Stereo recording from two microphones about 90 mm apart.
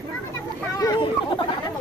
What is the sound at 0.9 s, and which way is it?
Speech, 60° left (ahead or behind).